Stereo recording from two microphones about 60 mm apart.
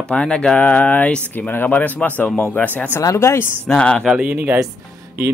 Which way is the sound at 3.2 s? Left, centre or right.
Left.